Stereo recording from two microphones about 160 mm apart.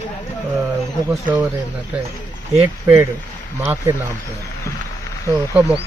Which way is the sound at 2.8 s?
15° right (ahead or behind).